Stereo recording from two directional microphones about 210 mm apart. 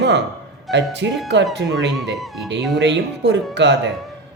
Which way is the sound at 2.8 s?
55° right (ahead or behind).